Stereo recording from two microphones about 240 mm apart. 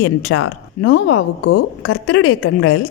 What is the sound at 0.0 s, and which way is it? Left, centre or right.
A woman's voice, left.